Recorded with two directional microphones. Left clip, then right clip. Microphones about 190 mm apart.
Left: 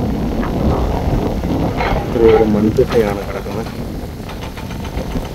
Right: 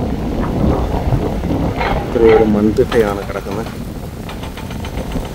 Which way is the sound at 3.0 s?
Centre (ahead or behind).